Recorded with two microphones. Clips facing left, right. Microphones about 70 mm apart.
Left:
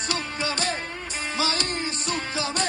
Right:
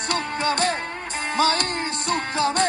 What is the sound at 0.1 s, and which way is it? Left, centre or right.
Music, right.